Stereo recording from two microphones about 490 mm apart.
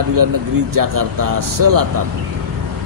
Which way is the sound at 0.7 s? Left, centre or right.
Right.